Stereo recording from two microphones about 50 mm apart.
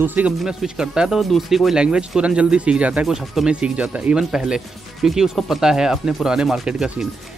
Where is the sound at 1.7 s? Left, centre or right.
Centre.